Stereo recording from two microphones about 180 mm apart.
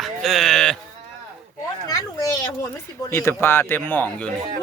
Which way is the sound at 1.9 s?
20° left (ahead or behind).